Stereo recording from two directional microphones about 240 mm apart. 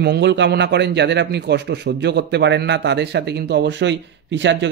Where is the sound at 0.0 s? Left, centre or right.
Right.